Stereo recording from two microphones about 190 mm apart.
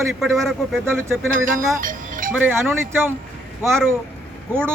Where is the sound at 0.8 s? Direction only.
10° right (ahead or behind).